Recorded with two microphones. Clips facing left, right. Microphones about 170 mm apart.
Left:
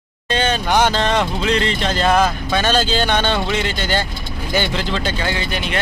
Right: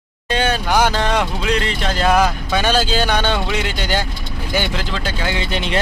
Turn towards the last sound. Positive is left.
turn(degrees=-25)  # may be behind; listen again after turning